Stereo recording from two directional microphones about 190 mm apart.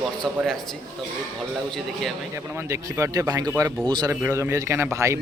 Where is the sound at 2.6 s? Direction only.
15° right (ahead or behind).